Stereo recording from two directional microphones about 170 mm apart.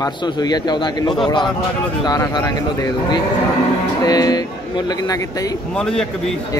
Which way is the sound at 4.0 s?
20° left (ahead or behind).